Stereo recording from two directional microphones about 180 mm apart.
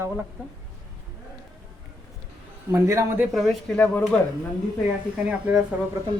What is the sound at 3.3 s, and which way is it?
Speech, centre (ahead or behind).